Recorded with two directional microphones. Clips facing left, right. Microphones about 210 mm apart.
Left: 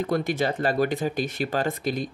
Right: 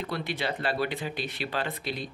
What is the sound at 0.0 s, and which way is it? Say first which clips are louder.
Speech: left 7 dB; 45° left (ahead or behind).